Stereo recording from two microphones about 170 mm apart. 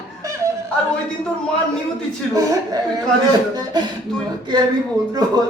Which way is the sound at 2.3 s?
20° right (ahead or behind).